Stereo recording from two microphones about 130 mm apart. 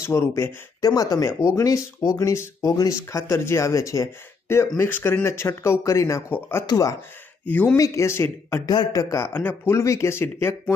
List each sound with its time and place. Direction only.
0.0 s speech: 20° left (ahead or behind)
1.3 s speech: 10° right (ahead or behind)
1.5 s speech: 25° left (ahead or behind)
7.4 s speech: 10° left (ahead or behind)
7.8 s speech: 20° left (ahead or behind)
8.6 s speech: 30° left (ahead or behind)